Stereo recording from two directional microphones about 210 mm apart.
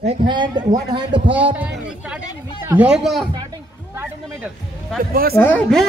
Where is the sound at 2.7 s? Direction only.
5° right (ahead or behind).